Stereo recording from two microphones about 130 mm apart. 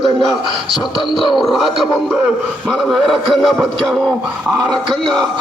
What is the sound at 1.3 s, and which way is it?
Speech, centre (ahead or behind).